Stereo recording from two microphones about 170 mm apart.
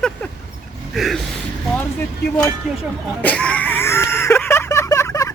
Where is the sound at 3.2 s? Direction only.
5° left (ahead or behind).